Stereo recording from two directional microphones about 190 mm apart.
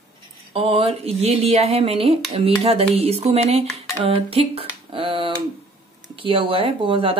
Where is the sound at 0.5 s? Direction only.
30° right (ahead or behind).